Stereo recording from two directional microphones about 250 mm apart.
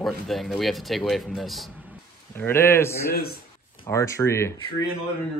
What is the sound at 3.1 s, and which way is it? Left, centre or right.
Speech, left.